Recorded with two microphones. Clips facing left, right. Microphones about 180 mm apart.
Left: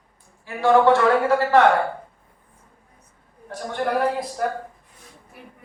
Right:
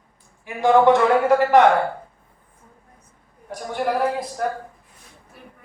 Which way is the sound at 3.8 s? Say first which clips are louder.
Even; 5° right (ahead or behind).